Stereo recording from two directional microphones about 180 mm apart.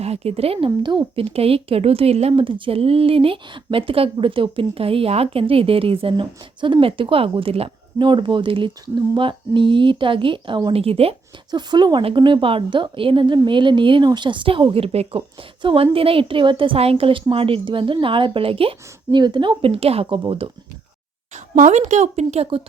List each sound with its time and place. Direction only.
0.0 s a woman's voice: 35° right (ahead or behind)
21.3 s speech: 40° right (ahead or behind)